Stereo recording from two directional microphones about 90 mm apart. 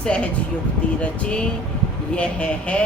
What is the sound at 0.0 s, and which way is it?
A woman's voice, 10° left (ahead or behind).